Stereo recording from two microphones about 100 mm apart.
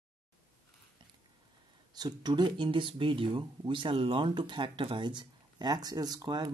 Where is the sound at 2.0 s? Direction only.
45° right (ahead or behind).